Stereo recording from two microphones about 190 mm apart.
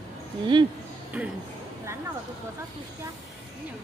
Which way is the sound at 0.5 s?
25° right (ahead or behind).